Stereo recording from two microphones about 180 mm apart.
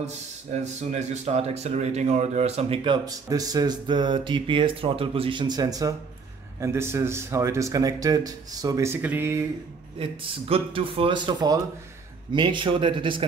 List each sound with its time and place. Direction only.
0.0 s speech: 40° right (ahead or behind); by 9.4 s 10° right (ahead or behind)
10.5 s speech: 30° right (ahead or behind)